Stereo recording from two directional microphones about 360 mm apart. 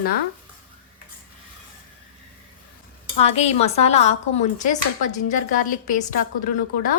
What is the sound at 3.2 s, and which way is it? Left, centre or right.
Speech, centre.